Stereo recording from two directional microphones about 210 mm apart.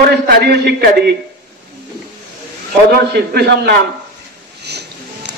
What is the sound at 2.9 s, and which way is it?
Speech, 50° right (ahead or behind).